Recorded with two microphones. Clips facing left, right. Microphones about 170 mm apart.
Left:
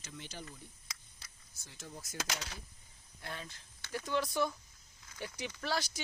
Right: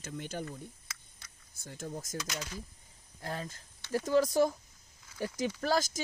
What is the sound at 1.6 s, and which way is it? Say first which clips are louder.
Speech: right 9 dB; 50° right (ahead or behind).